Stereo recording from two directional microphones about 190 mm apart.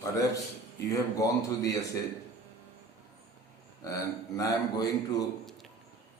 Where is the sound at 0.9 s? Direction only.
15° left (ahead or behind).